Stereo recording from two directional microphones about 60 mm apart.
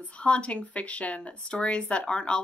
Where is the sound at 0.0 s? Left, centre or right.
Centre.